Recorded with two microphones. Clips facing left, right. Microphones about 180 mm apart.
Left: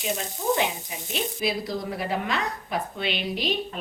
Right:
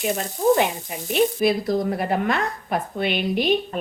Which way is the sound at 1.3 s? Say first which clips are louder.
Right 8 dB; 50° right (ahead or behind).